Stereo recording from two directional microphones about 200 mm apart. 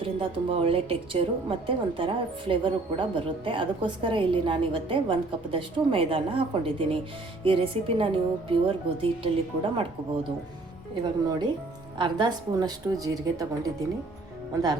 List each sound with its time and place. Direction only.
0.0 s a woman's voice: 25° right (ahead or behind)
11.0 s a woman's voice: 20° right (ahead or behind)